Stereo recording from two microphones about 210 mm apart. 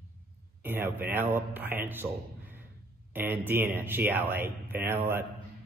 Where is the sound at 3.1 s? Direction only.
10° right (ahead or behind).